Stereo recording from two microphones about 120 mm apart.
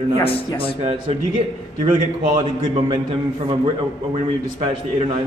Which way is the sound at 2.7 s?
45° right (ahead or behind).